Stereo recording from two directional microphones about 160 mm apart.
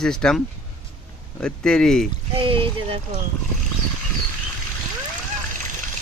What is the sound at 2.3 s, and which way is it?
Speech, 35° right (ahead or behind).